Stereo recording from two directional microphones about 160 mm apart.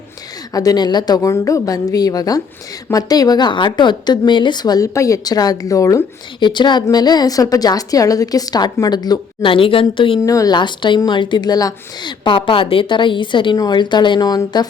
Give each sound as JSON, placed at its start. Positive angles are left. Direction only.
{"t": 0.5, "sound": "a woman's voice", "side_deg": 20}
{"t": 10.2, "sound": "a woman's voice", "side_deg": 20}